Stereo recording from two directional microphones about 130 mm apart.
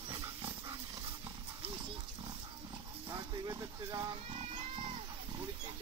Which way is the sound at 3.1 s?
25° right (ahead or behind).